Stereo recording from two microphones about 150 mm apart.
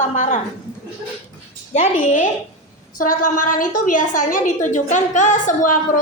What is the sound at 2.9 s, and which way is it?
A woman's voice, 65° left (ahead or behind).